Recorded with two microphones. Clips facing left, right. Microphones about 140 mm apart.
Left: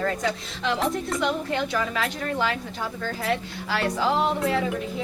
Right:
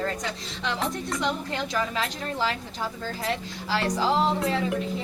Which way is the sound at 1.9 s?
30° right (ahead or behind).